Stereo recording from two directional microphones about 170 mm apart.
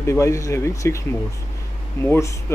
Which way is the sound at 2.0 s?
10° left (ahead or behind).